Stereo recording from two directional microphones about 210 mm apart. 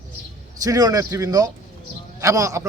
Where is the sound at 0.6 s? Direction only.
15° right (ahead or behind).